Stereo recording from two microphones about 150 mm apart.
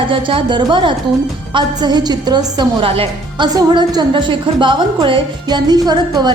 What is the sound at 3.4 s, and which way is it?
A woman's voice, 30° right (ahead or behind).